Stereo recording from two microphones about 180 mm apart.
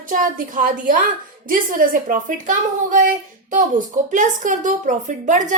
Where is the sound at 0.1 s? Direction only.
50° right (ahead or behind).